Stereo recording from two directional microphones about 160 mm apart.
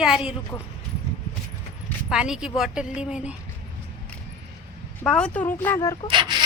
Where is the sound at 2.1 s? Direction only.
5° right (ahead or behind).